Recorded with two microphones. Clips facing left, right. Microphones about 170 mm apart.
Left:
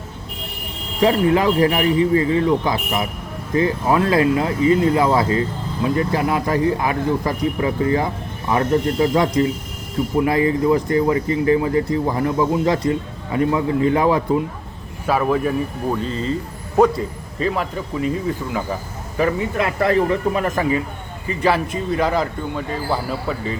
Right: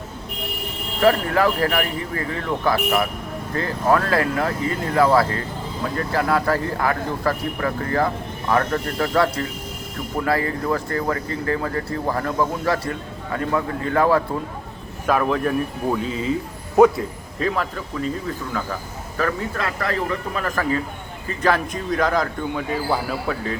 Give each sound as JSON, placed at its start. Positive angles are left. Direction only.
{"t": 1.0, "sound": "speech", "side_deg": 20}
{"t": 15.0, "sound": "speech", "side_deg": 10}
{"t": 21.2, "sound": "speech", "side_deg": 10}